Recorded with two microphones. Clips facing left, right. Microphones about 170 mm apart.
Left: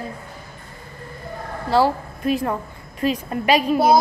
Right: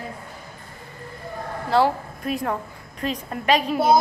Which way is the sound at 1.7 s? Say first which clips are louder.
Left 2 dB; centre (ahead or behind).